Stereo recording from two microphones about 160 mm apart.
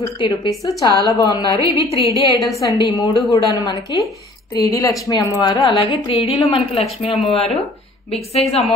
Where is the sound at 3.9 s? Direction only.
30° left (ahead or behind).